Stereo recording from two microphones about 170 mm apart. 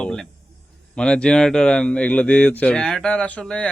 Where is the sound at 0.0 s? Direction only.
5° left (ahead or behind).